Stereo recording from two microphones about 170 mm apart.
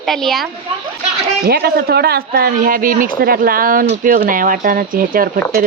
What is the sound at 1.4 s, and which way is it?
Speech, 65° right (ahead or behind).